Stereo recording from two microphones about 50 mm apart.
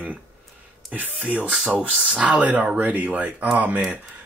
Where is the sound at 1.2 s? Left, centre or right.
Right.